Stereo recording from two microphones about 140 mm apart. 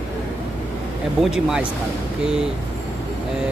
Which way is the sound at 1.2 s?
5° right (ahead or behind).